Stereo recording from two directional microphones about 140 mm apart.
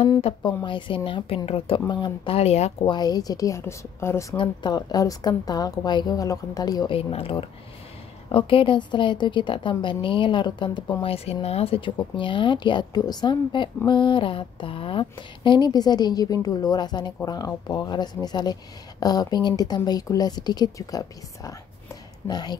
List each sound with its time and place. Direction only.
0.4 s speech: 30° left (ahead or behind); by 2.7 s 50° left (ahead or behind)
2.8 s speech: 30° left (ahead or behind)
4.4 s speech: 30° left (ahead or behind)
7.0 s speech: 45° left (ahead or behind)